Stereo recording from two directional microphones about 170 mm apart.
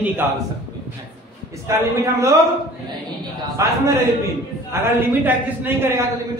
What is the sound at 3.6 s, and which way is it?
A man's voice, 20° right (ahead or behind).